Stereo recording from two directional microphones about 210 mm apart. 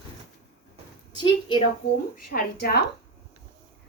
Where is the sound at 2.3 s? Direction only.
45° left (ahead or behind).